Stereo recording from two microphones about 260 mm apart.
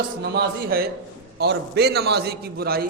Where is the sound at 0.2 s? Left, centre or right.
Right.